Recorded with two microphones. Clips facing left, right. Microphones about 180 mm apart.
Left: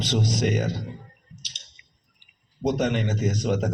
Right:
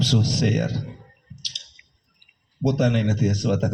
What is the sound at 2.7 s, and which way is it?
A man's voice, 70° right (ahead or behind).